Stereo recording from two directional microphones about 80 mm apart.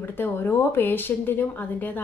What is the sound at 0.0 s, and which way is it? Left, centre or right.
A woman's voice, left.